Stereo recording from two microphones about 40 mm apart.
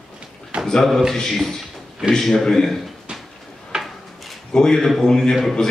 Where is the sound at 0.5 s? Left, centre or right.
Right.